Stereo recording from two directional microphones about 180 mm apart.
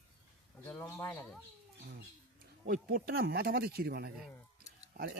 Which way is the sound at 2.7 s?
55° right (ahead or behind).